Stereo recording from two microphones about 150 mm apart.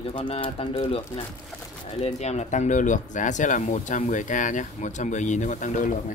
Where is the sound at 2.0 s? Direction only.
45° left (ahead or behind).